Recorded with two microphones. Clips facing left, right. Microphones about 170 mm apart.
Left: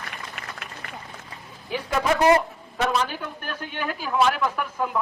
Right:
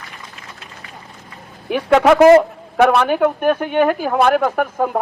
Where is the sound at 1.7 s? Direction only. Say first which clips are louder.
Right 11 dB; 75° right (ahead or behind).